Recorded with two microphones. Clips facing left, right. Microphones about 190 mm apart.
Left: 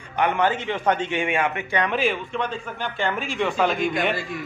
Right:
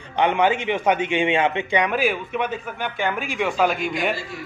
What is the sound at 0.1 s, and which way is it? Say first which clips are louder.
A man's voice: right 2 dB; 20° right (ahead or behind).